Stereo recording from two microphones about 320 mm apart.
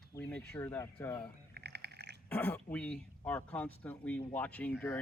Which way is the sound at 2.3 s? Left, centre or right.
Centre.